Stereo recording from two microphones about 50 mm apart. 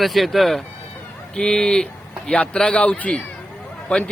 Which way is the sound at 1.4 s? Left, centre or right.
Centre.